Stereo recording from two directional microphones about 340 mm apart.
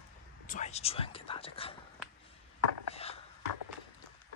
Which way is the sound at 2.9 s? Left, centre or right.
Centre.